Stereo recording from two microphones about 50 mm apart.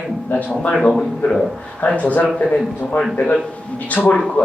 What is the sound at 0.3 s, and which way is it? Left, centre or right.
Speech, left.